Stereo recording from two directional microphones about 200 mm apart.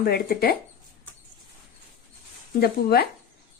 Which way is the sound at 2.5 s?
50° left (ahead or behind).